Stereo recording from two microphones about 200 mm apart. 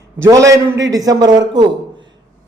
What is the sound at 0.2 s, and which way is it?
A man's voice, 15° right (ahead or behind).